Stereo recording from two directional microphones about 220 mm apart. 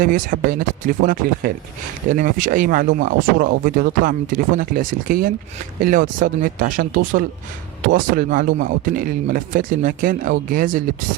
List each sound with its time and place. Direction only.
0.0 s speech: 40° right (ahead or behind)